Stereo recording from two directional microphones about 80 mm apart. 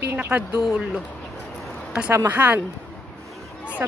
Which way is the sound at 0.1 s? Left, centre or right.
Right.